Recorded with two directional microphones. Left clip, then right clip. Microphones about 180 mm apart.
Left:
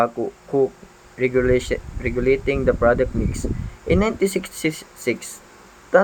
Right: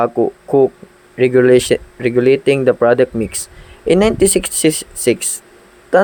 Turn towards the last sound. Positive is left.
turn(degrees=-35)  # may be behind; listen again after turning